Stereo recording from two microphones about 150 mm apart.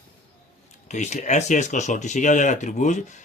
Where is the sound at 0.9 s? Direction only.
50° left (ahead or behind).